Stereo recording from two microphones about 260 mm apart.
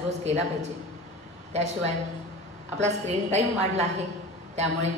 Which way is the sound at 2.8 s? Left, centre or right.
Right.